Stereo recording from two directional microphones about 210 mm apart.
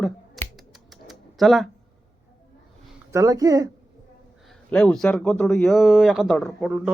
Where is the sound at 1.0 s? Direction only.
Centre (ahead or behind).